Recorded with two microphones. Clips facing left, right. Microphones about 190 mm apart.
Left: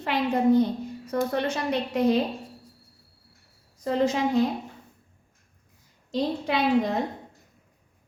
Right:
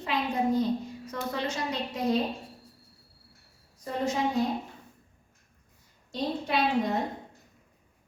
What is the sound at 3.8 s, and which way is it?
Speech, 90° left.